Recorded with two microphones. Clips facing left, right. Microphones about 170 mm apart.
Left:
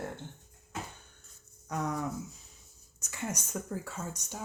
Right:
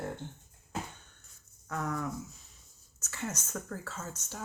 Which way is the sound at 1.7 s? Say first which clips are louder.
Left 1 dB; 20° left (ahead or behind).